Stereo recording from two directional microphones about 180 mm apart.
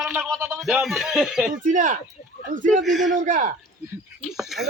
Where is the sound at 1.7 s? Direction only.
45° right (ahead or behind).